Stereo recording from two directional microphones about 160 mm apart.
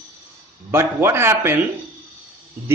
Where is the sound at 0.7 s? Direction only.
15° right (ahead or behind).